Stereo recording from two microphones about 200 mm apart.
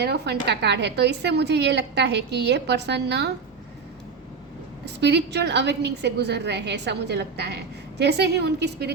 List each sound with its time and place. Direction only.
0.0 s a woman's voice: 55° right (ahead or behind)
4.9 s a woman's voice: 60° right (ahead or behind)